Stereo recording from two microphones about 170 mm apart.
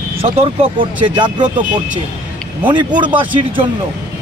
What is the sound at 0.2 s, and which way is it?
Speech, 35° right (ahead or behind).